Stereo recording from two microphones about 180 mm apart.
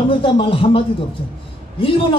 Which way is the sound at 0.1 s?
30° left (ahead or behind).